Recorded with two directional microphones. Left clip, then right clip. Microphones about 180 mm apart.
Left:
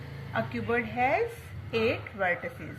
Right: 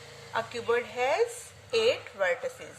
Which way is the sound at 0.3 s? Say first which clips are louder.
Right 1 dB; 45° right (ahead or behind).